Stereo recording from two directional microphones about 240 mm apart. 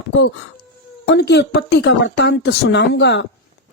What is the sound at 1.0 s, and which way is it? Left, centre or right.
A woman's voice, left.